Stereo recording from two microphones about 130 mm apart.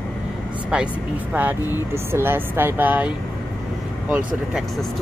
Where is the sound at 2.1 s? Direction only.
15° right (ahead or behind).